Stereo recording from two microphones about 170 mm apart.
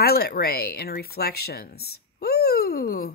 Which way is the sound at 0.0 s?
65° left (ahead or behind).